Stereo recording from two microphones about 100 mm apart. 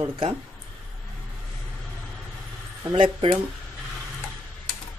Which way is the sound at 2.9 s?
60° right (ahead or behind).